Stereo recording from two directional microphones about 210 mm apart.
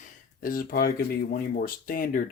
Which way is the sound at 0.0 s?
45° left (ahead or behind).